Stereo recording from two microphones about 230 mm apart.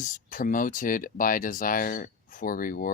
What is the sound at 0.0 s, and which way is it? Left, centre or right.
Speech, left.